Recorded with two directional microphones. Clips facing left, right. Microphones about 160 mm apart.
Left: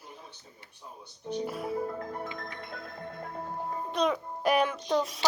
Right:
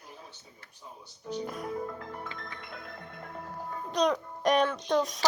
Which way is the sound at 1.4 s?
5° left (ahead or behind).